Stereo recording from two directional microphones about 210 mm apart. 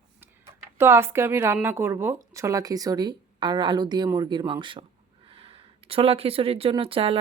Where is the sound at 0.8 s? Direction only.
10° right (ahead or behind).